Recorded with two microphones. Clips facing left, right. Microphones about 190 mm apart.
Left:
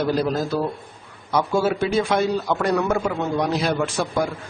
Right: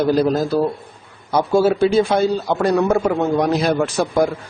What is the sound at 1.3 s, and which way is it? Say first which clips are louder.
A man's voice: right 5 dB; 30° right (ahead or behind).